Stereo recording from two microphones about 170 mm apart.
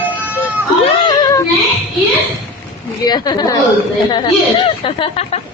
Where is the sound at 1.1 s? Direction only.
25° left (ahead or behind).